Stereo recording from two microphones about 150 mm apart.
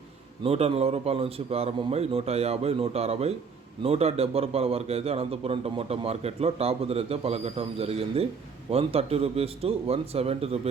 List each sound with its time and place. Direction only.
0.4 s a man's voice: 40° right (ahead or behind)